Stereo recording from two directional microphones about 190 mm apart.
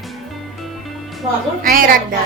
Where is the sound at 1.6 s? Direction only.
50° right (ahead or behind).